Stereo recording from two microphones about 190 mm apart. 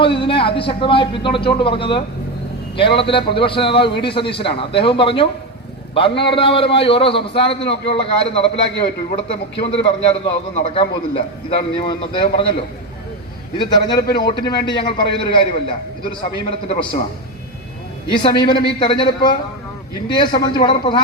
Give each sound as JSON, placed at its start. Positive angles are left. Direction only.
{"t": 0.0, "sound": "a man's voice", "side_deg": 25}
{"t": 13.6, "sound": "a man's voice", "side_deg": 25}
{"t": 18.1, "sound": "a man's voice", "side_deg": 25}